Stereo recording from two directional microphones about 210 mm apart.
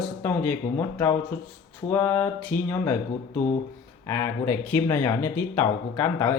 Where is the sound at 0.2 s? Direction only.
10° left (ahead or behind).